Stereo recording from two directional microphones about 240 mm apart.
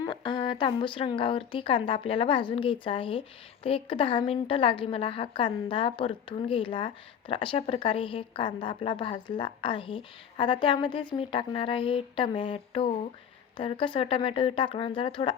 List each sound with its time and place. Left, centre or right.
0.0 s speech: centre